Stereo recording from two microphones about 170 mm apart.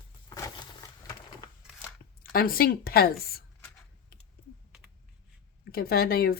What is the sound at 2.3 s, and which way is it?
Speech, 60° left (ahead or behind).